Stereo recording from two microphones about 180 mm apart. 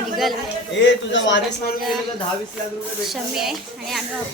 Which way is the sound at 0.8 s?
85° left.